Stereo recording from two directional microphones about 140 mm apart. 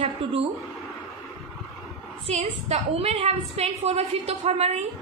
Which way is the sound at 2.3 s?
50° right (ahead or behind).